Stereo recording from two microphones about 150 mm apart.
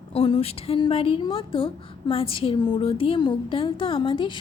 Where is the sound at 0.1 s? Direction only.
40° left (ahead or behind).